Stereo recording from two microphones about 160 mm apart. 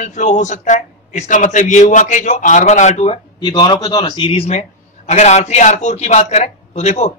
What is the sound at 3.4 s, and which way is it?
Speech, 25° left (ahead or behind).